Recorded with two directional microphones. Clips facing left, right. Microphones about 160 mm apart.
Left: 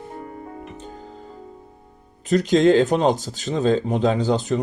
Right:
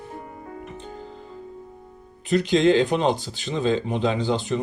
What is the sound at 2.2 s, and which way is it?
Speech, 40° left (ahead or behind).